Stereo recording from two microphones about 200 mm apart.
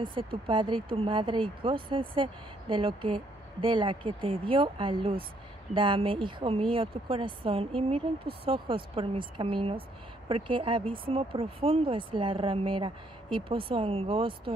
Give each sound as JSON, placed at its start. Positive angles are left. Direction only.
{"t": 0.0, "sound": "speech", "side_deg": -25}